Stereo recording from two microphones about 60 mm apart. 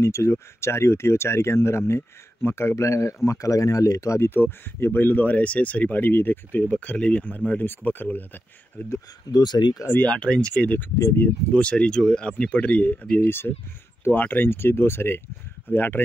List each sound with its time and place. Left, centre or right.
0.0 s speech: left
3.3 s speech: left
4.3 s speech: left
6.7 s speech: left
9.3 s speech: left
10.0 s speech: centre
13.2 s speech: left